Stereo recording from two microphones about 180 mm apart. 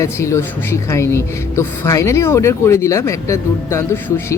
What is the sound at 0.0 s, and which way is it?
Speech, 15° left (ahead or behind).